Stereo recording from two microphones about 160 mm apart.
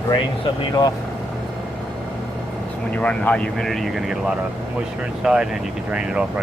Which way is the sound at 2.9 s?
10° left (ahead or behind).